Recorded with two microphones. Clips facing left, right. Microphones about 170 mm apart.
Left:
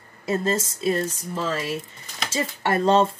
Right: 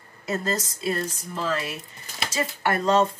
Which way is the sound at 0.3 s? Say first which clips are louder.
Left 4 dB; 25° left (ahead or behind).